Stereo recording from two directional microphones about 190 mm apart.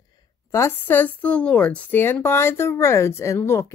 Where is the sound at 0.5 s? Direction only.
10° left (ahead or behind).